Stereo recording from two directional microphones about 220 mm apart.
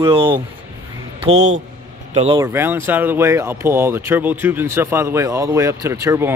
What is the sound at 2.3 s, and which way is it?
Speech, 15° right (ahead or behind).